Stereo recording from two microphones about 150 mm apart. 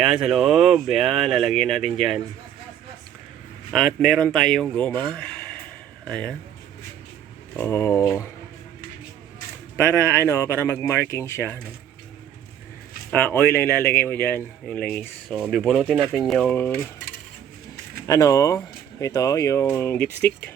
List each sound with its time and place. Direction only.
0.0 s speech: 5° right (ahead or behind)
3.7 s speech: 5° left (ahead or behind)
7.6 s speech: 20° left (ahead or behind)
9.7 s speech: 15° left (ahead or behind)
13.1 s speech: 10° left (ahead or behind)
16.5 s speech: 15° left (ahead or behind)
18.0 s speech: 20° left (ahead or behind)